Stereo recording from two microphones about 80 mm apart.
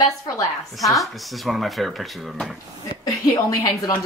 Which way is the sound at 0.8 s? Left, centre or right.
Centre.